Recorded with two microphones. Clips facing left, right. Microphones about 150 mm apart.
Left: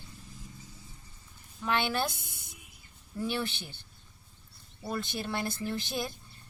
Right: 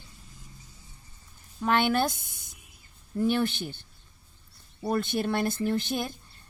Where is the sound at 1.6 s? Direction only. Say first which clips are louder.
Right 6 dB; 50° right (ahead or behind).